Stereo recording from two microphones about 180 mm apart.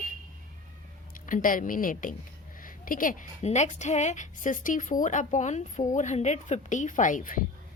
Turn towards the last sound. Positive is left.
turn(degrees=50)  # may be behind; listen again after turning